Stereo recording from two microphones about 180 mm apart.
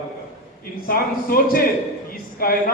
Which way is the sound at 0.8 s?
55° left (ahead or behind).